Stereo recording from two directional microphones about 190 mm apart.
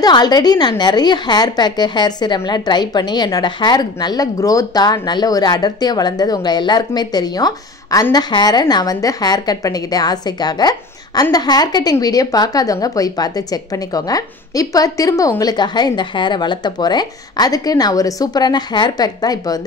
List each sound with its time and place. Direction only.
0.0 s a woman's voice: 20° left (ahead or behind)